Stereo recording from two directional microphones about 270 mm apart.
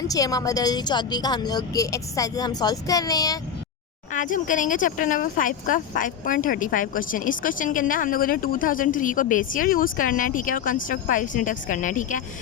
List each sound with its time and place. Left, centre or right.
0.1 s a woman's voice: centre
4.1 s speech: left